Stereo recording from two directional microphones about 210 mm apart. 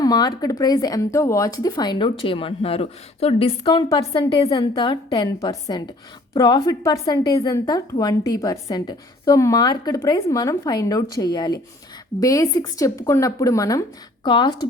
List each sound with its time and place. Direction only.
0.0 s a woman's voice: 20° left (ahead or behind)